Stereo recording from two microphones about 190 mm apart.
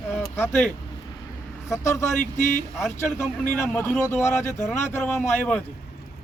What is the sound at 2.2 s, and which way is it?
Speech, 40° left (ahead or behind).